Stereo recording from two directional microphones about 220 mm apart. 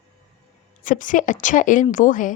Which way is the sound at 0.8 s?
35° left (ahead or behind).